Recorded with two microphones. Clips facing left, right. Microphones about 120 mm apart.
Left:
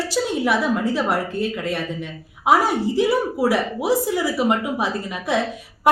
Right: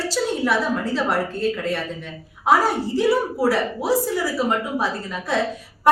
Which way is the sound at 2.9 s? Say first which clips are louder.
Even; 15° left (ahead or behind).